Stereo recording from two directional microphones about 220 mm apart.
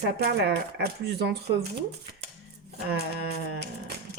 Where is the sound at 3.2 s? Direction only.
50° right (ahead or behind).